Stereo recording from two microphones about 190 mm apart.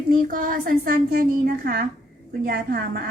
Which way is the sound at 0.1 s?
45° right (ahead or behind).